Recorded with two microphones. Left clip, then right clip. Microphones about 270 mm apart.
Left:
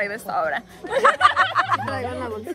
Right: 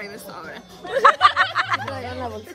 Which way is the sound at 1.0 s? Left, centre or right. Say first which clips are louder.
Right 2 dB; centre.